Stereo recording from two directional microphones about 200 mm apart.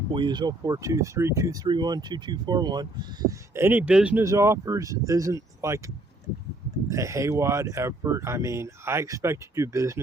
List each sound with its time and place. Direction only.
0.1 s speech: 25° right (ahead or behind)
6.9 s speech: 15° right (ahead or behind)